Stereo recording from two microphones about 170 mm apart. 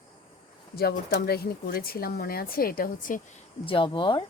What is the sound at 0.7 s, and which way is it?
Speech, 65° left (ahead or behind).